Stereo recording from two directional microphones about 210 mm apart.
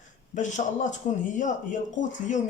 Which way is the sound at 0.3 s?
35° left (ahead or behind).